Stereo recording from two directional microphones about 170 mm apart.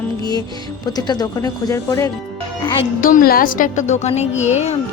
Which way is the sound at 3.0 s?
55° left (ahead or behind).